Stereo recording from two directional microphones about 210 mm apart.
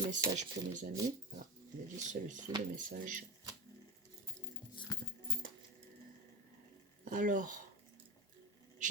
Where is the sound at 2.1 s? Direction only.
35° right (ahead or behind).